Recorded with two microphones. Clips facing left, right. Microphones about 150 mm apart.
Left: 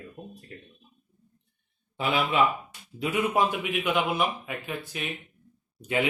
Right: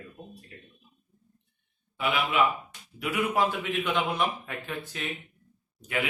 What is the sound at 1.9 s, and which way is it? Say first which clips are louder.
Speech: left 2 dB; 30° left (ahead or behind).